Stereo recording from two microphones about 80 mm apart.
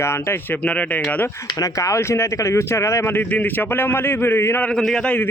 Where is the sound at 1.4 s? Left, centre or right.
Left.